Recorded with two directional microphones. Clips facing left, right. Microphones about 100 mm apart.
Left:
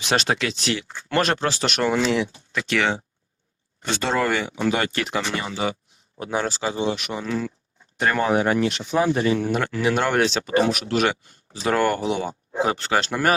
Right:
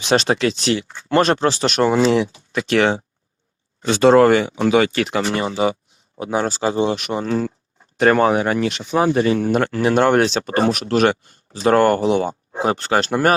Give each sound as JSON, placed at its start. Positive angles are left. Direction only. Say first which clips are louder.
{"t": 0.0, "sound": "speech", "louder": "right 6 dB", "side_deg": -30}
{"t": 4.7, "sound": "speech", "louder": "right 10 dB", "side_deg": -90}
{"t": 5.2, "sound": "speech", "louder": "right 7 dB", "side_deg": -40}
{"t": 6.1, "sound": "speech", "louder": "right 4 dB", "side_deg": -20}
{"t": 6.4, "sound": "speech", "louder": "right 6 dB", "side_deg": -40}
{"t": 7.9, "sound": "speech", "louder": "right 6 dB", "side_deg": -65}